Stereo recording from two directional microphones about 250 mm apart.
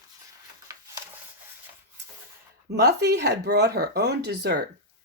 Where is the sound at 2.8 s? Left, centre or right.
Right.